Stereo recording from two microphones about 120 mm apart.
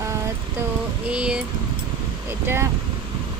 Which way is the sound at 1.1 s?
10° right (ahead or behind).